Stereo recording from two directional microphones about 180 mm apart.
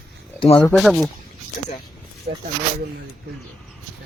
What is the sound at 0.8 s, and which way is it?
Speech, centre (ahead or behind).